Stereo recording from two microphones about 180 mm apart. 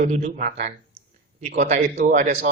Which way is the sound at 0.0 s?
40° right (ahead or behind).